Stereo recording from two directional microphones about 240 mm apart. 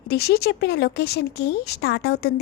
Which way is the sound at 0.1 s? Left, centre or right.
Left.